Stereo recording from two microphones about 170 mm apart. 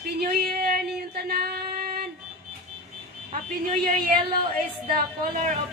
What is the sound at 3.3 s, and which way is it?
A woman's voice, 50° right (ahead or behind).